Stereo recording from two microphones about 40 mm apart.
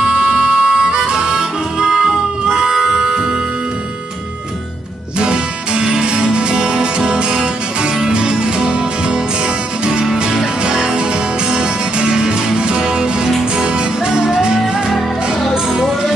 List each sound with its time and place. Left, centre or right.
0.0 s music: right
5.2 s music: right